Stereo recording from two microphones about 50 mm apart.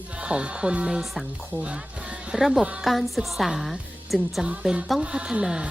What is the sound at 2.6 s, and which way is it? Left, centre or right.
Speech, centre.